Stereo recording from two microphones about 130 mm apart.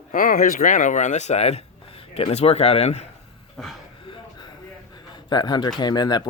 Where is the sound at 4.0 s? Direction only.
40° left (ahead or behind).